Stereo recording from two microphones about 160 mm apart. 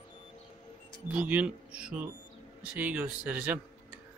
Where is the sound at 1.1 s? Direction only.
10° right (ahead or behind).